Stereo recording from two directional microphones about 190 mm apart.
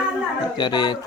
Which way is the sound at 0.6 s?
25° left (ahead or behind).